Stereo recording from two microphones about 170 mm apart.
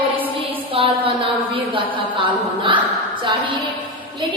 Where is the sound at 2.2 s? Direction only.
30° right (ahead or behind).